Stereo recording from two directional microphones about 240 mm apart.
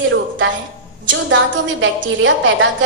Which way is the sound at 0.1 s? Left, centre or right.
Right.